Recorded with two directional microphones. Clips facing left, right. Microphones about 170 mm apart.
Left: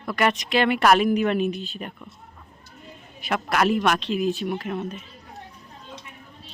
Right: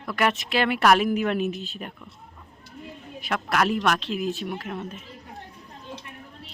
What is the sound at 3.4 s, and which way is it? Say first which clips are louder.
A woman's voice: left 2 dB; centre (ahead or behind).